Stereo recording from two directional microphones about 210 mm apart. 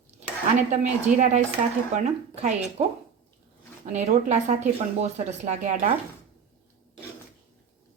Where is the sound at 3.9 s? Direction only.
35° right (ahead or behind).